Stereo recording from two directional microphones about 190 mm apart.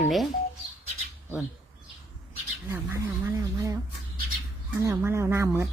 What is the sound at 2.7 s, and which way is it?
Speech, 15° right (ahead or behind).